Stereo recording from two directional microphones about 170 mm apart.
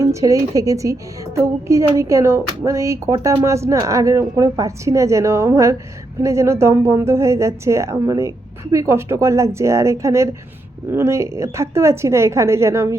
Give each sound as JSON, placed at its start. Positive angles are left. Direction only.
{"t": 0.0, "sound": "a woman's voice", "side_deg": -20}